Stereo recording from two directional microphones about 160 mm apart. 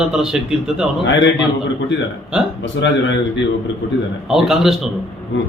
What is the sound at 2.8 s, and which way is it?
Speech, 90° left.